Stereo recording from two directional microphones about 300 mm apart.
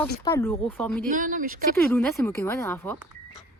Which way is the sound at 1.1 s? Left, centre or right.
Right.